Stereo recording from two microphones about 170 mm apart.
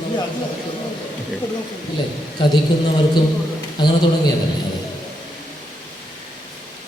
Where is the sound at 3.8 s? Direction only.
25° left (ahead or behind).